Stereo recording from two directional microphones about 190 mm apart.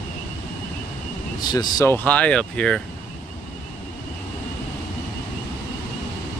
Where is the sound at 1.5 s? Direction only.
20° left (ahead or behind).